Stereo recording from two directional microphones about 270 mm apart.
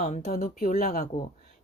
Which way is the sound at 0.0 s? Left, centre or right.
Left.